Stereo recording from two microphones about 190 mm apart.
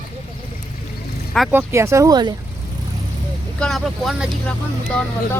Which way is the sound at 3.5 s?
5° left (ahead or behind).